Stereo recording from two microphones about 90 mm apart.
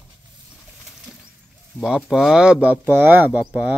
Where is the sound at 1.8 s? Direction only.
5° right (ahead or behind).